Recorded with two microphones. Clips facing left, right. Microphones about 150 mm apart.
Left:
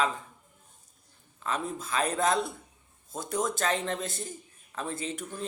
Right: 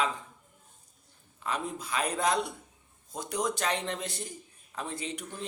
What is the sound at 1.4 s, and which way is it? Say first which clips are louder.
A man's voice: left 1 dB; 15° right (ahead or behind).